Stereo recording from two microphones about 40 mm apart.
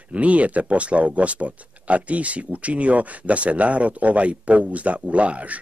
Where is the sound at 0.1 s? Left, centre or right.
Right.